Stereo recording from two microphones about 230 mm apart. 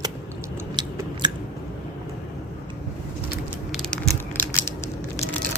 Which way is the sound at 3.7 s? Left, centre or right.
Centre.